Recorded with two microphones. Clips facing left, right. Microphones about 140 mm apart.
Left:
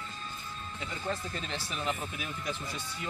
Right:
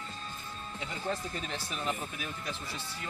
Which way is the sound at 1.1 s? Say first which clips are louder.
Even; 5° right (ahead or behind).